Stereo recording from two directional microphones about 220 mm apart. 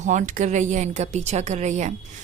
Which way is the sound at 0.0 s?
35° right (ahead or behind).